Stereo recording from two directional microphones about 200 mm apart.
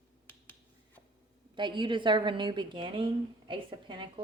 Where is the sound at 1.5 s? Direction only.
25° right (ahead or behind).